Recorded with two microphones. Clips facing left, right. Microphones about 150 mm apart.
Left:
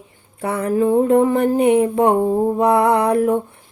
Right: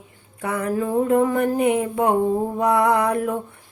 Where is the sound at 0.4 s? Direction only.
30° left (ahead or behind).